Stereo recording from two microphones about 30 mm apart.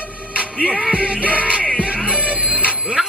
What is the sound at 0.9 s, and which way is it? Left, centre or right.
Music, right.